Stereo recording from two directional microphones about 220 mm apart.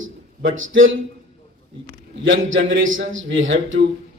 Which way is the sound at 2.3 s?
60° right (ahead or behind).